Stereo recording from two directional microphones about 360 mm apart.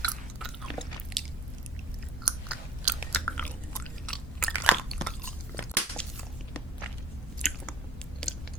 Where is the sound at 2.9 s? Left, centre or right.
Centre.